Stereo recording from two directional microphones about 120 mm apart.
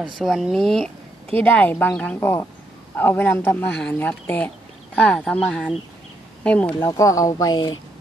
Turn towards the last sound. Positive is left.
turn(degrees=35)  # may be behind; listen again after turning